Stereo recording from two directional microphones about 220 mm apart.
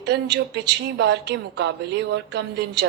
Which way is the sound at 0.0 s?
50° right (ahead or behind).